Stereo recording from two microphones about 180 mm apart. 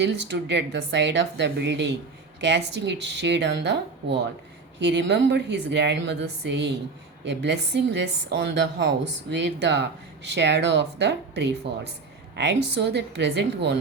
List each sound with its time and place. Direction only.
0.0 s a woman's voice: 75° right (ahead or behind)
4.8 s a woman's voice: 75° right (ahead or behind)